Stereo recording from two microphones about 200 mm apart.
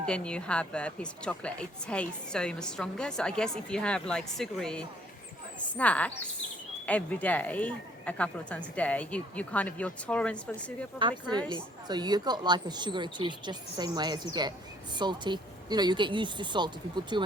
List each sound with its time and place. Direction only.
0.0 s a woman's voice: 5° left (ahead or behind)
11.0 s a woman's voice: 20° right (ahead or behind)